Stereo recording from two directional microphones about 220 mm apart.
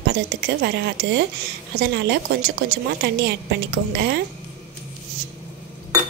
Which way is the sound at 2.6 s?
50° right (ahead or behind).